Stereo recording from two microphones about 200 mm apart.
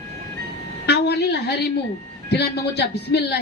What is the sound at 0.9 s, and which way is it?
A woman's voice, 55° left (ahead or behind).